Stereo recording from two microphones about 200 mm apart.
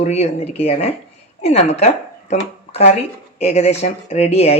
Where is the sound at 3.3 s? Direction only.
35° left (ahead or behind).